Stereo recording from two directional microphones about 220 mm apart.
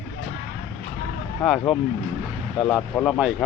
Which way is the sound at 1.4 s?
Centre (ahead or behind).